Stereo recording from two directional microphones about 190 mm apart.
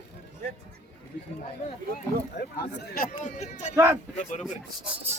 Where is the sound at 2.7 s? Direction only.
55° left (ahead or behind); by 3.7 s 40° left (ahead or behind).